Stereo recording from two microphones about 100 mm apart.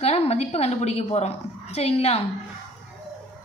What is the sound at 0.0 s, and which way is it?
A woman's voice, 90° left.